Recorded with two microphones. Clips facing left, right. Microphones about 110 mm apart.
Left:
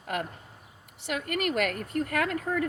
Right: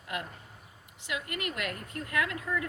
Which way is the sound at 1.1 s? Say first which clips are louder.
Left 7 dB; 60° left (ahead or behind).